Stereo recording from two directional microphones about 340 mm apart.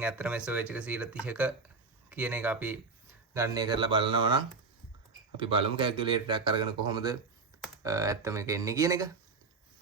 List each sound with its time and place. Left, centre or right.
0.0 s speech: centre
5.5 s speech: centre